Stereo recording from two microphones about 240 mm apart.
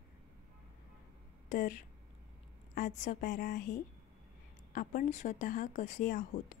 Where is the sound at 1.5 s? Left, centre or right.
Left.